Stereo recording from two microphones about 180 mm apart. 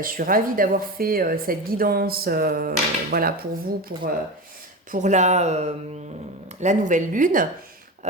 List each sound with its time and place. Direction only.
0.0 s a woman's voice: 50° right (ahead or behind)
4.9 s a woman's voice: 40° right (ahead or behind)